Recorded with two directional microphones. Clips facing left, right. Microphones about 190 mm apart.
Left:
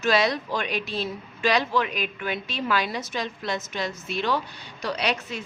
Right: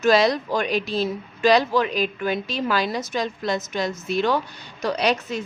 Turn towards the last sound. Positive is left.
turn(degrees=-45)  # may be behind; listen again after turning